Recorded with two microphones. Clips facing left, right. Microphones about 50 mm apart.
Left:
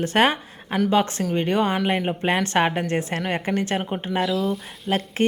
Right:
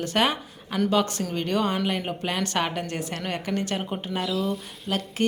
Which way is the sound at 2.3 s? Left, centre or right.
Left.